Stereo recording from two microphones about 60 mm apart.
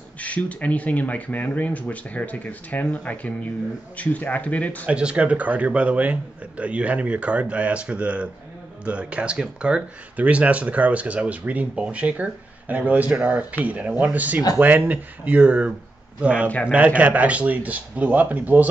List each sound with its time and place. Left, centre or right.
0.2 s speech: left
4.8 s a man's voice: centre